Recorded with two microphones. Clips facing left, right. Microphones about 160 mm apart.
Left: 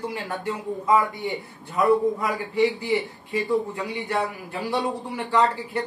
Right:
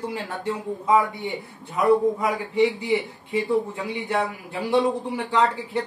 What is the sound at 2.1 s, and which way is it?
A man's voice, 20° right (ahead or behind).